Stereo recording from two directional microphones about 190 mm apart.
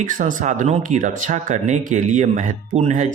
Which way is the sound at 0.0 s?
45° right (ahead or behind).